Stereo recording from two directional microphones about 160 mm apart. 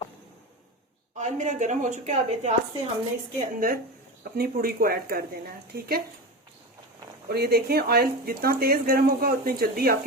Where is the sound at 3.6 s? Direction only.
65° right (ahead or behind).